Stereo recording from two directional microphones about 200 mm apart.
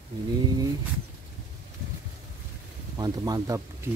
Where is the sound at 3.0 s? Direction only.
15° right (ahead or behind).